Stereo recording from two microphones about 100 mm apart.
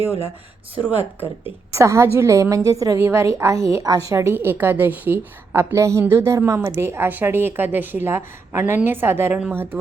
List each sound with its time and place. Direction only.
0.9 s a woman's voice: 20° right (ahead or behind)